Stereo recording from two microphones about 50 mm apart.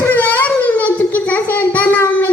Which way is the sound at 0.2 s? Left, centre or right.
Left.